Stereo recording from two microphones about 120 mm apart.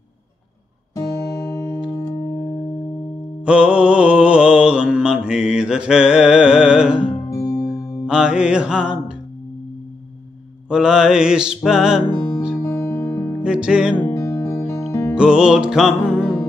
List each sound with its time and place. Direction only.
0.9 s music: 20° left (ahead or behind)
3.4 s mantra: 5° right (ahead or behind)
7.2 s music: 25° left (ahead or behind)
8.1 s music: 5° right (ahead or behind)
10.7 s mantra: 5° right (ahead or behind)
12.5 s music: 20° left (ahead or behind)
13.4 s music: 5° right (ahead or behind)
13.9 s music: 20° left (ahead or behind)
15.1 s music: 5° right (ahead or behind)